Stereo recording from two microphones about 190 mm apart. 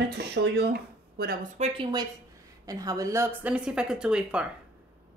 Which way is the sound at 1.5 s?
30° right (ahead or behind).